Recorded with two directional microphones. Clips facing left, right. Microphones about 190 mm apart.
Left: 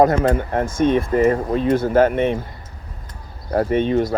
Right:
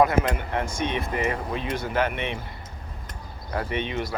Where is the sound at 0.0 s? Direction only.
45° left (ahead or behind).